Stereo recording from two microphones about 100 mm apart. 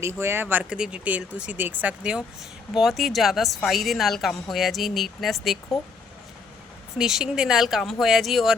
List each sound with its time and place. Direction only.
0.0 s speech: 25° right (ahead or behind)
0.6 s speech: 10° right (ahead or behind)
2.7 s a woman's voice: centre (ahead or behind)
7.0 s a woman's voice: 5° right (ahead or behind)